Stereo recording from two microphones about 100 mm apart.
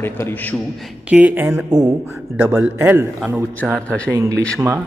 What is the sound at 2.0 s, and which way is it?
Speech, 20° right (ahead or behind).